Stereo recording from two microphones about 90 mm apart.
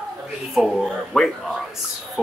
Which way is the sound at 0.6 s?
5° left (ahead or behind).